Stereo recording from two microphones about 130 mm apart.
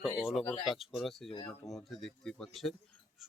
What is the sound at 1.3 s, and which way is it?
Speech, 40° left (ahead or behind).